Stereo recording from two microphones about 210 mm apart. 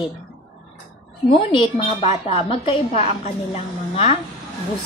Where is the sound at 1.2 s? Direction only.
25° left (ahead or behind).